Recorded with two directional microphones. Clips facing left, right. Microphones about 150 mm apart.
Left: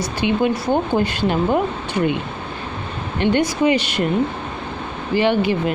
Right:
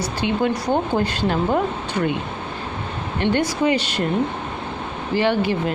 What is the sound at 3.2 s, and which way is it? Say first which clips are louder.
Speech: left 3 dB; 15° left (ahead or behind).